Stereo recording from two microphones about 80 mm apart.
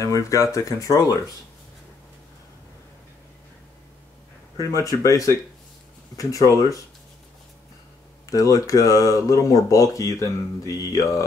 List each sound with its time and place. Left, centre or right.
0.0 s speech: left
4.6 s speech: left
8.3 s speech: left